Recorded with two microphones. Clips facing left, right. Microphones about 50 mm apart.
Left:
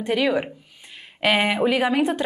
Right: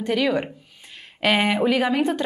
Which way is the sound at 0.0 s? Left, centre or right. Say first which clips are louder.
Even; centre.